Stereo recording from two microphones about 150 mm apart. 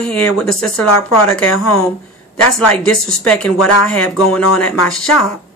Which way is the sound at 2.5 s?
5° left (ahead or behind).